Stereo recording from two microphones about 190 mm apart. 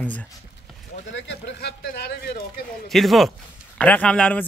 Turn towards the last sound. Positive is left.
turn(degrees=5)  # may be behind; listen again after turning